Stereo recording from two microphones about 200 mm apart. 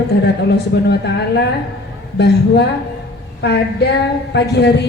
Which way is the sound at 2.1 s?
55° left (ahead or behind).